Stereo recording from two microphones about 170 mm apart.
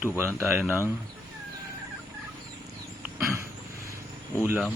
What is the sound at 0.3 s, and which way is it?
Speech, 15° right (ahead or behind).